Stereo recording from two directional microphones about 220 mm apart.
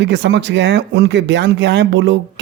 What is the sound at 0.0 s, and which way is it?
Speech, 55° right (ahead or behind).